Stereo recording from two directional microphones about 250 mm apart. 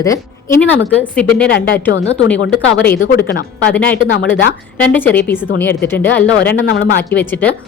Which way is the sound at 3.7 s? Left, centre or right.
Centre.